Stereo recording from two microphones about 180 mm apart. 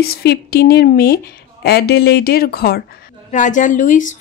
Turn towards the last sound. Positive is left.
turn(degrees=45)  # may be behind; listen again after turning